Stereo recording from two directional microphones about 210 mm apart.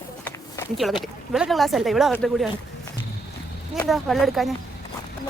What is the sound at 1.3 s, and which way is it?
A woman's voice, centre (ahead or behind).